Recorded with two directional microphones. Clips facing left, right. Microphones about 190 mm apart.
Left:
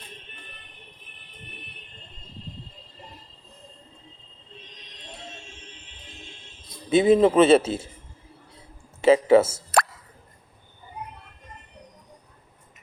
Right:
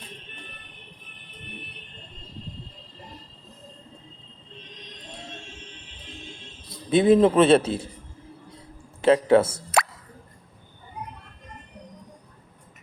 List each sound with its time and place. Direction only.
6.9 s a man's voice: centre (ahead or behind)
9.0 s a sound: 5° left (ahead or behind)
9.7 s plop: centre (ahead or behind)